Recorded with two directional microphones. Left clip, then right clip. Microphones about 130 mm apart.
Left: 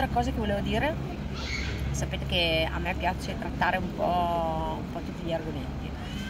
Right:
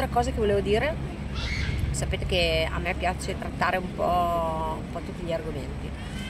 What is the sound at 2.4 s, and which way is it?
Speech, 40° right (ahead or behind).